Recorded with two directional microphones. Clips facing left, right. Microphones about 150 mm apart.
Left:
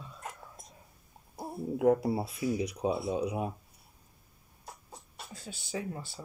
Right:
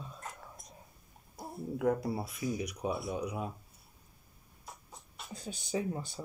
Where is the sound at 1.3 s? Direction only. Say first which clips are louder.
Left 4 dB; 25° left (ahead or behind).